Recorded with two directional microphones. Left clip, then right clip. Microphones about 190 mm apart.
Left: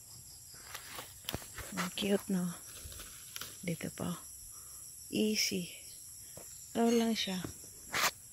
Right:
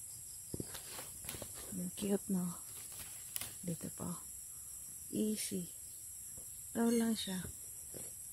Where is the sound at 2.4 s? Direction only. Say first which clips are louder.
Left 3 dB; 10° left (ahead or behind).